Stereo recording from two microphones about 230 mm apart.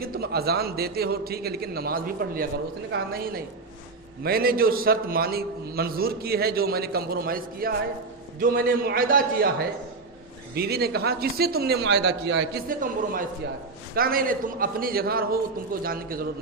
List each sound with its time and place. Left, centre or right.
0.0 s a man's voice: right